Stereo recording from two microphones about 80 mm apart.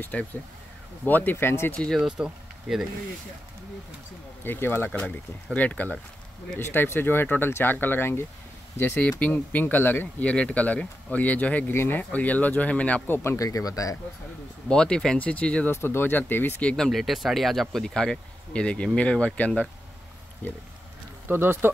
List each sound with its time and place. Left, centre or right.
0.0 s speech: centre
2.0 s speech: centre
4.5 s speech: left
10.2 s speech: centre
11.7 s speech: left
12.0 s speech: centre
13.4 s speech: left
14.7 s speech: centre
15.7 s speech: left
16.6 s speech: centre
21.3 s speech: right